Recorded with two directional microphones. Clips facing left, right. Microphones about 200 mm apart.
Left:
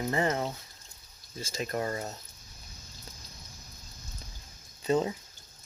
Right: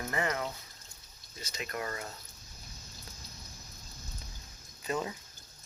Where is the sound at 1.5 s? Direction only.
35° left (ahead or behind).